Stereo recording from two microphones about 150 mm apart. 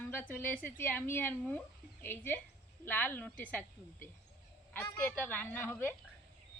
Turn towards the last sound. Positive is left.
turn(degrees=10)  # may be behind; listen again after turning